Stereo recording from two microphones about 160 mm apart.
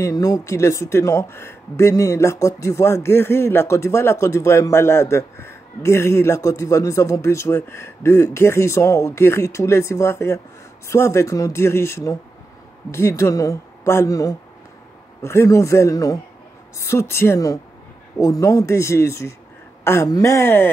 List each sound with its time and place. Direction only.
0.0 s speech: 20° left (ahead or behind)